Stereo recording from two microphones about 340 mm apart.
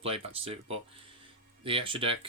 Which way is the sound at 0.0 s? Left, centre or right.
Centre.